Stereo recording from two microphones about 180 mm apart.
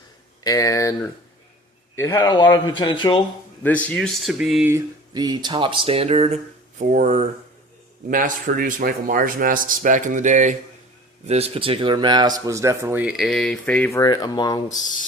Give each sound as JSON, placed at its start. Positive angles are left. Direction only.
{"t": 0.4, "sound": "speech", "side_deg": 20}
{"t": 2.1, "sound": "speech", "side_deg": 25}
{"t": 3.6, "sound": "speech", "side_deg": 10}
{"t": 4.7, "sound": "speech", "side_deg": -20}
{"t": 14.0, "sound": "speech", "side_deg": 20}